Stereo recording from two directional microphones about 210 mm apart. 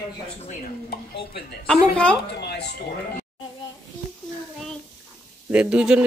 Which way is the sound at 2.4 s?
55° left (ahead or behind).